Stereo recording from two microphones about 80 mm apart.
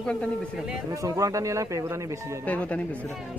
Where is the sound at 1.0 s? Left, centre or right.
Right.